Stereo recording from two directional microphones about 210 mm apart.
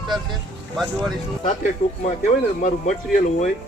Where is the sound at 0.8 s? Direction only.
Centre (ahead or behind).